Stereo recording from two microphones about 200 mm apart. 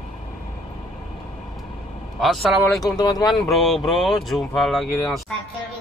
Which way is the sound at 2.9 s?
20° left (ahead or behind).